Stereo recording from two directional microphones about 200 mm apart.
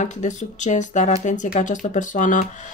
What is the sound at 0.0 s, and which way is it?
Speech, 35° left (ahead or behind).